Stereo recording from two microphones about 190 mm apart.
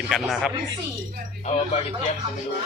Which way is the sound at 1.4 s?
30° left (ahead or behind).